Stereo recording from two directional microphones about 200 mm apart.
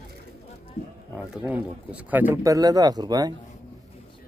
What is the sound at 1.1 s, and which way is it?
Speech, 5° right (ahead or behind).